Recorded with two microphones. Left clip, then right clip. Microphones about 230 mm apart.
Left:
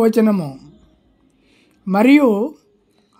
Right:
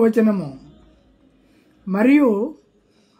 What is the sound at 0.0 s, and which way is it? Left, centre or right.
Speech, left.